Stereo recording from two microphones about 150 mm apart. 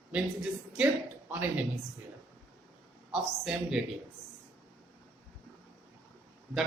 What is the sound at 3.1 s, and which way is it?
Speech, 5° right (ahead or behind).